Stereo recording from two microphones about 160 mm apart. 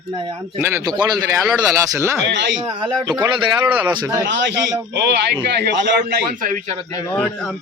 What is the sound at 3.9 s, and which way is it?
Speech, 25° right (ahead or behind).